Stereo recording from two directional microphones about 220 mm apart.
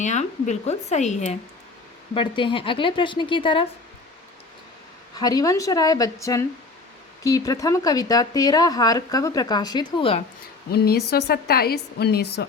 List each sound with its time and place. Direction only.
0.0 s a woman's voice: 35° left (ahead or behind)
5.1 s speech: 15° left (ahead or behind)
10.7 s a woman's voice: 45° left (ahead or behind)